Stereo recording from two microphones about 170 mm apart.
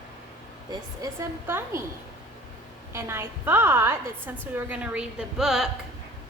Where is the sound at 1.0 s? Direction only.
15° right (ahead or behind).